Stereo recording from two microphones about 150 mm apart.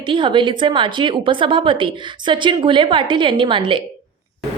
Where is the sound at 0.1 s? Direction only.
35° right (ahead or behind).